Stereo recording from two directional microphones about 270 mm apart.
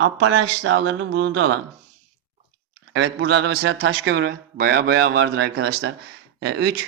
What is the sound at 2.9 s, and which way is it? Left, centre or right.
Speech, right.